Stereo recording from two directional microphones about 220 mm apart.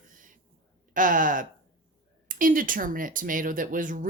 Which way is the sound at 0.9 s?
35° right (ahead or behind).